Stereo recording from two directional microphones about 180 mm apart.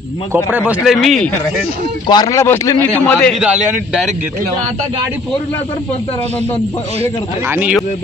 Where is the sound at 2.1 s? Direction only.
20° left (ahead or behind); by 4.1 s 5° right (ahead or behind).